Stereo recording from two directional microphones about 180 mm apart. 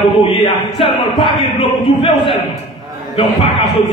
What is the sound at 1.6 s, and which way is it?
Speech, 30° left (ahead or behind).